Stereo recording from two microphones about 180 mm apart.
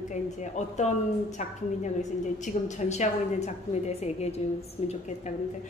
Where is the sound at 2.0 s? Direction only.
40° left (ahead or behind).